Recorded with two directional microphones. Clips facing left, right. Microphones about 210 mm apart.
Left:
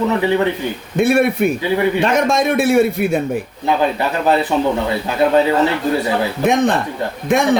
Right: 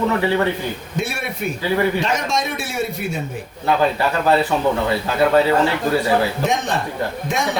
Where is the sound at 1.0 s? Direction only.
55° left (ahead or behind).